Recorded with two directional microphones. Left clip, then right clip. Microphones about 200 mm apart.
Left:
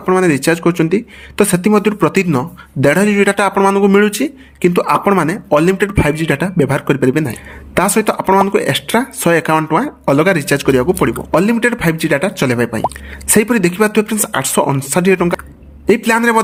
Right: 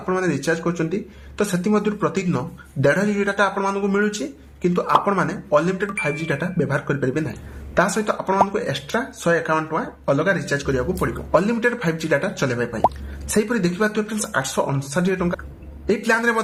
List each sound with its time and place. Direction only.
0.0 s speech: 40° left (ahead or behind)